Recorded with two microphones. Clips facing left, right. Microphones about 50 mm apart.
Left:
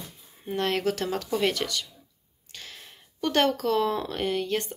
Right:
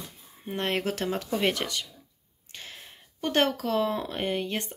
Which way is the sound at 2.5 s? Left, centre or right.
Right.